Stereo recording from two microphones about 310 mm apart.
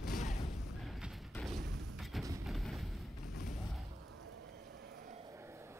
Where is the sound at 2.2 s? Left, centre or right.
Centre.